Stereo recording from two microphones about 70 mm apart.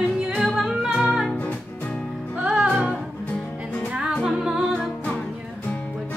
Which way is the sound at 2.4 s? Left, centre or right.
Centre.